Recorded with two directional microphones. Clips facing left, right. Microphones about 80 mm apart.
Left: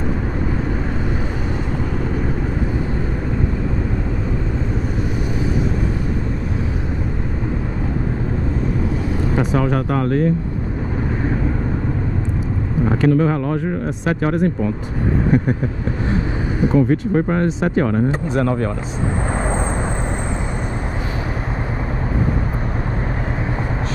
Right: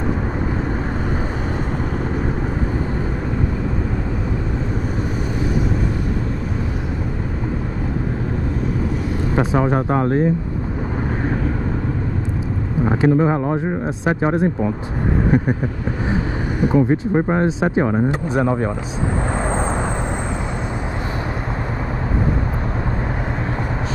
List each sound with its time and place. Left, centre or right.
9.3 s speech: right
12.8 s speech: centre
16.6 s speech: centre